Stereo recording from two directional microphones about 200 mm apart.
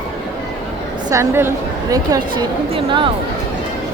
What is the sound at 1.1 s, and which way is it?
A woman's voice, 15° right (ahead or behind).